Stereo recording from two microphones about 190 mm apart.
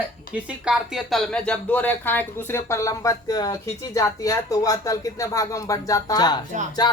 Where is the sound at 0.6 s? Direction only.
5° right (ahead or behind).